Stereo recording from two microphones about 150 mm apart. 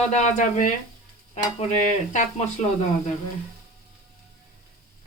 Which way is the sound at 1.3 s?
45° left (ahead or behind).